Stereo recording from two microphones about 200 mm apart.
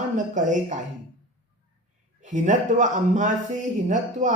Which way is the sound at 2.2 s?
40° right (ahead or behind).